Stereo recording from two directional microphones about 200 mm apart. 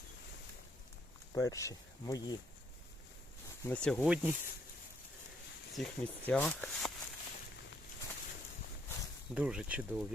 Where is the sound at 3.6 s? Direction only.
5° left (ahead or behind).